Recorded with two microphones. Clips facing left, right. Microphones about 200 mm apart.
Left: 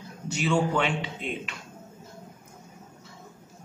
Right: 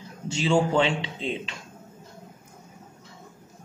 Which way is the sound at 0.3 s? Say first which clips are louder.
Right 3 dB; 25° right (ahead or behind).